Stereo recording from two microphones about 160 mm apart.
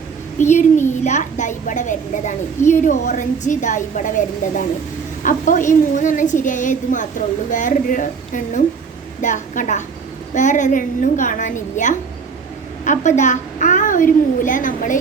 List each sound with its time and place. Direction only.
0.3 s a woman's voice: 50° left (ahead or behind)